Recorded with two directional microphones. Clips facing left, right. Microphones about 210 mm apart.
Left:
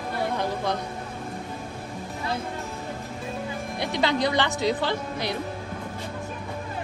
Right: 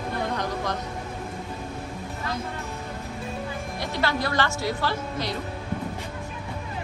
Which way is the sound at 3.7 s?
15° left (ahead or behind).